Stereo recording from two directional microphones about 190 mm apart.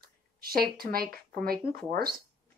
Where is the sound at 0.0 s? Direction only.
50° right (ahead or behind).